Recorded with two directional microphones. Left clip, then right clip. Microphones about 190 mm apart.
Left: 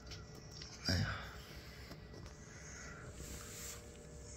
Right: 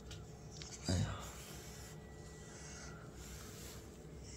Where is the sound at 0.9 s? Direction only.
20° right (ahead or behind).